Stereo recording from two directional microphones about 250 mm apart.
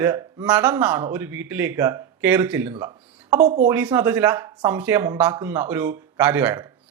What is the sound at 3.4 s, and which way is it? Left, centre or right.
Speech, right.